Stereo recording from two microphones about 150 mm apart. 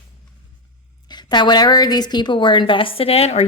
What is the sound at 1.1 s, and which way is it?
A woman's voice, 30° left (ahead or behind).